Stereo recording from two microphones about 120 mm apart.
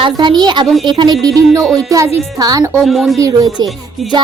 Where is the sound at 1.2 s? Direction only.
30° right (ahead or behind).